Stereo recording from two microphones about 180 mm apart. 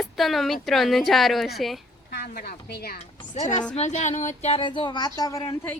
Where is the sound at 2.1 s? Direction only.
60° left (ahead or behind).